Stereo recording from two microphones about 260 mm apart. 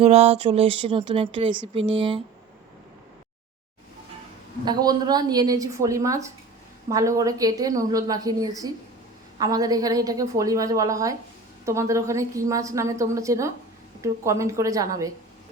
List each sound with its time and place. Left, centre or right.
0.0 s speech: right
4.6 s a woman's voice: centre